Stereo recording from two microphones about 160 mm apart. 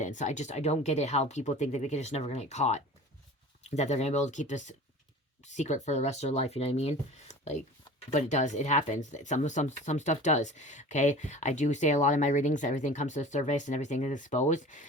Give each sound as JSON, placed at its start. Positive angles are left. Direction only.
{"t": 0.0, "sound": "speech", "side_deg": 50}